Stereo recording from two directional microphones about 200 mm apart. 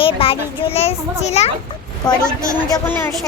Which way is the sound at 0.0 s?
30° left (ahead or behind).